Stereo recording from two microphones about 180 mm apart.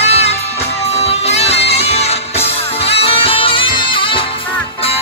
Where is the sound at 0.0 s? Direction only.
35° left (ahead or behind).